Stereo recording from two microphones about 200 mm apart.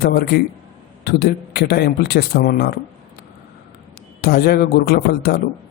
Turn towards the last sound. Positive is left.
turn(degrees=50)  # may be behind; listen again after turning